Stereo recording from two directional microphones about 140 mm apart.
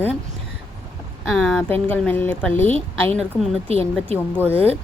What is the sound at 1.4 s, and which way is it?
A woman's voice, 10° left (ahead or behind).